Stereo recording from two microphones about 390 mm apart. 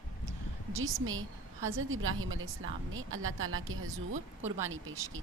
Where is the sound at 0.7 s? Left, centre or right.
Right.